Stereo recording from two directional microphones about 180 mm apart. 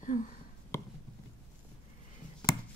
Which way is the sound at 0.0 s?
45° left (ahead or behind).